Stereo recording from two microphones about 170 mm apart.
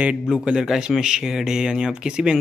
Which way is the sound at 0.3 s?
5° right (ahead or behind).